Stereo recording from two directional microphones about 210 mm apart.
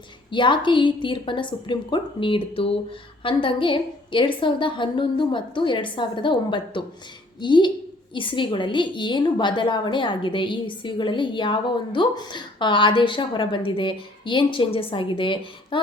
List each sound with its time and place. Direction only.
0.3 s a woman's voice: 20° left (ahead or behind)